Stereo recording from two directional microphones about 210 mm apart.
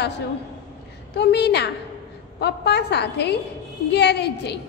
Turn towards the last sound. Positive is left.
turn(degrees=55)  # may be behind; listen again after turning